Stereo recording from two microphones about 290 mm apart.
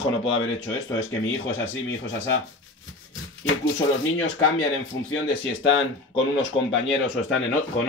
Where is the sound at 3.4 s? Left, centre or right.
Left.